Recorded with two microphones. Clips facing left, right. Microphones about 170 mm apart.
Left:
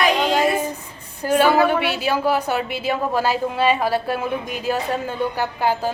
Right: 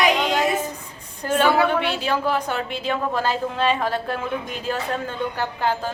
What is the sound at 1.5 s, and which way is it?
A woman's voice, 5° left (ahead or behind).